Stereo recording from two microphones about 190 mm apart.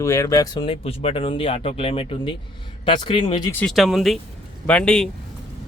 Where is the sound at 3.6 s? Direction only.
Centre (ahead or behind).